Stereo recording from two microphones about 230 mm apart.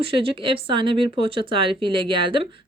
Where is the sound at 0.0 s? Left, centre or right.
Right.